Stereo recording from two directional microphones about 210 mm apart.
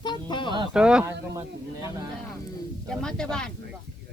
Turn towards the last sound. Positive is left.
turn(degrees=5)  # may be behind; listen again after turning